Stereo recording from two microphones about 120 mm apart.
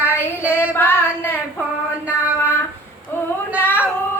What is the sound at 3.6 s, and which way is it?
Whimper, 15° left (ahead or behind).